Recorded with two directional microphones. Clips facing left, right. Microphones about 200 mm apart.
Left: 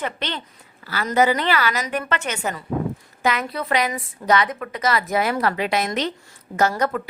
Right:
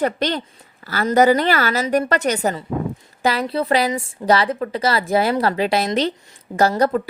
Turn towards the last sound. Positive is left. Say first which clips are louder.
# right 4 dB
turn(degrees=-30)  # may be behind; listen again after turning